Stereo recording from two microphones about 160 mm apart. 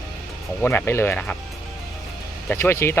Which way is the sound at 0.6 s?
15° left (ahead or behind).